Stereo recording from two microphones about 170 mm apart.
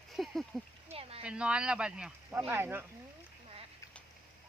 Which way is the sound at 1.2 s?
5° right (ahead or behind).